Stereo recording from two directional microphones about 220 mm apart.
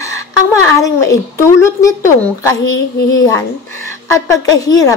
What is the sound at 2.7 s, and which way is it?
Speech, 55° left (ahead or behind).